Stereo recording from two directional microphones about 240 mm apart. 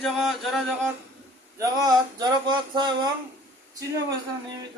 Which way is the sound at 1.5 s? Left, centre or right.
Centre.